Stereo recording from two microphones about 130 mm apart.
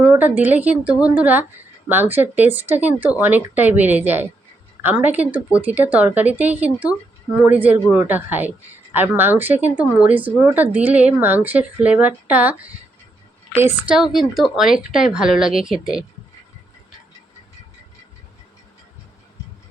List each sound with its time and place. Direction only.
0.0 s a woman's voice: 15° right (ahead or behind)
13.9 s speech: centre (ahead or behind)